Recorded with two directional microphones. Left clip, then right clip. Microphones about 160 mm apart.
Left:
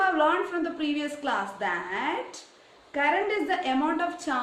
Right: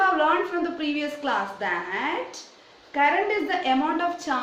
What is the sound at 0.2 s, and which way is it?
A woman's voice, 20° left (ahead or behind).